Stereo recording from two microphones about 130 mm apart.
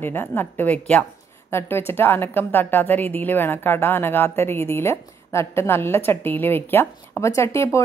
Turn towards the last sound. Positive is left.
turn(degrees=20)  # may be behind; listen again after turning